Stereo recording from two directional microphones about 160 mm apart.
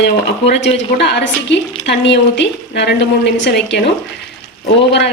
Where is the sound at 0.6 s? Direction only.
90° left.